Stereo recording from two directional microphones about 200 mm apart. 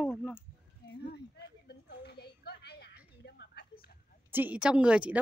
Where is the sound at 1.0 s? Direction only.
55° left (ahead or behind).